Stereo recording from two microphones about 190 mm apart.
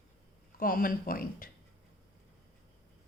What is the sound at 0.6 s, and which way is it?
Speech, 50° left (ahead or behind).